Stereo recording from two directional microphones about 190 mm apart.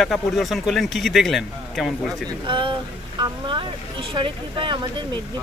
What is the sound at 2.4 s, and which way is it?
Speech, 25° right (ahead or behind).